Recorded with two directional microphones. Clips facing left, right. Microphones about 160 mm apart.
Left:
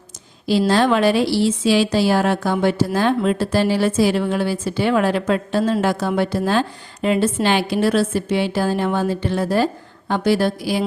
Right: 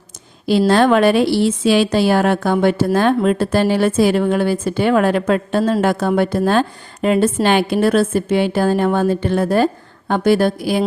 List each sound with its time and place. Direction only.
0.7 s a woman's voice: 55° right (ahead or behind)